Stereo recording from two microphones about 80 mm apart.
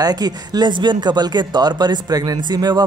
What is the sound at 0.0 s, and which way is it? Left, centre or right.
Speech, right.